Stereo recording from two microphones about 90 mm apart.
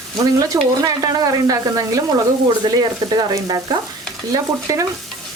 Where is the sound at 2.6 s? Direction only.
45° right (ahead or behind).